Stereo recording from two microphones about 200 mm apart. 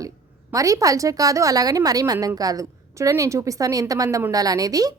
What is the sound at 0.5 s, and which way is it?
Speech, 15° right (ahead or behind).